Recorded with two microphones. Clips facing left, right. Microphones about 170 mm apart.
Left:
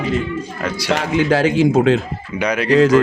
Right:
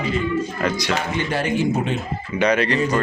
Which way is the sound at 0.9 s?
90° left.